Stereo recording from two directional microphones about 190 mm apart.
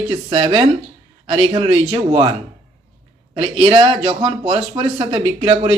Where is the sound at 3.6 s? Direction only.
25° right (ahead or behind).